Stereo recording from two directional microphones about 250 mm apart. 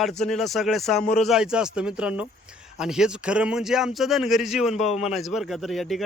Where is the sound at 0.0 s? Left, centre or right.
Centre.